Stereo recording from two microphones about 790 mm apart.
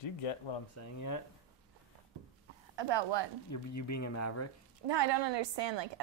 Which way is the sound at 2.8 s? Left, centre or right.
Right.